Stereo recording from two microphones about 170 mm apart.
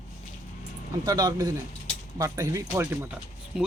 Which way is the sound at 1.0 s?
25° right (ahead or behind).